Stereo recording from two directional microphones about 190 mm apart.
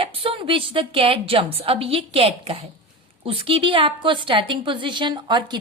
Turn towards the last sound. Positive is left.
turn(degrees=-25)  # may be behind; listen again after turning